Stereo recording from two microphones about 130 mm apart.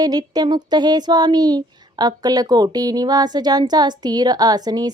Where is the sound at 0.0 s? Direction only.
30° right (ahead or behind).